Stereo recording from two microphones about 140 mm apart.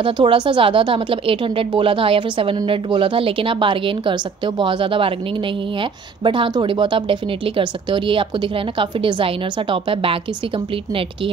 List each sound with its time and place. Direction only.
0.0 s speech: 35° right (ahead or behind)